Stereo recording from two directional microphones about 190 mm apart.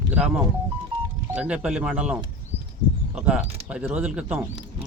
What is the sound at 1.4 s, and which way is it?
Speech, 5° right (ahead or behind).